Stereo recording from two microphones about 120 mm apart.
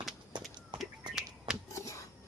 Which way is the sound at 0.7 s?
40° right (ahead or behind).